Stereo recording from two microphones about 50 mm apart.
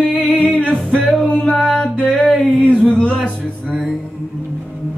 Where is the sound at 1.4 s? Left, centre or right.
Centre.